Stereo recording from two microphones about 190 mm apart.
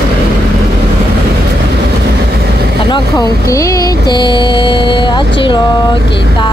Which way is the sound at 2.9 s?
20° left (ahead or behind).